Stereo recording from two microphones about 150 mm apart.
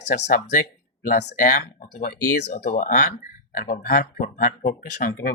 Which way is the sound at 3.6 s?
70° left (ahead or behind).